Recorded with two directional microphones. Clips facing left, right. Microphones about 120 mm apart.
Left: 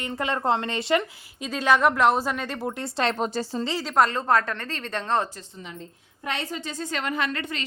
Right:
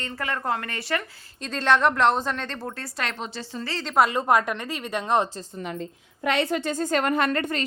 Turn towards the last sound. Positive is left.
turn(degrees=-45)  # may be behind; listen again after turning